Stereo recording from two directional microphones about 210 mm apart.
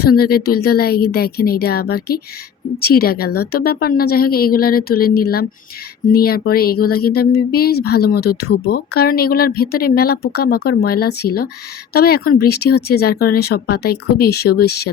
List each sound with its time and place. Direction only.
0.0 s speech: 45° left (ahead or behind)